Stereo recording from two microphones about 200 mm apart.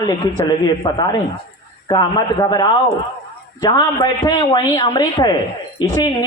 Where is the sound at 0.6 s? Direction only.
20° left (ahead or behind).